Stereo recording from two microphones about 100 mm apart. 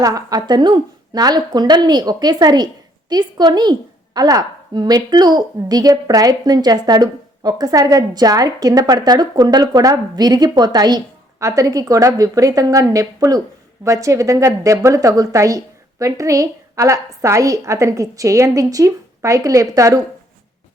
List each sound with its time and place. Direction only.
0.0 s a woman's voice: 40° right (ahead or behind)